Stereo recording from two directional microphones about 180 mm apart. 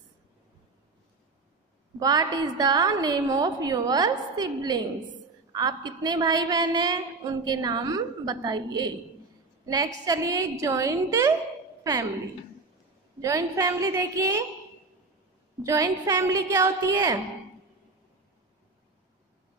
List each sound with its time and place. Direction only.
2.0 s a woman's voice: 20° right (ahead or behind)
10.0 s a woman's voice: 20° right (ahead or behind)
13.2 s a woman's voice: 20° right (ahead or behind)
15.6 s a woman's voice: 15° right (ahead or behind)